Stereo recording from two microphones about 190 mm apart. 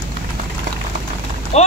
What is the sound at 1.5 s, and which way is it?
Speech, 35° left (ahead or behind).